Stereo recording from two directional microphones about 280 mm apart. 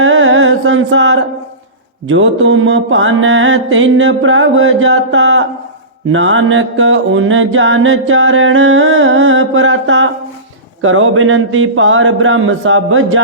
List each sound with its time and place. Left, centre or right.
0.0 s music: right
2.0 s mantra: right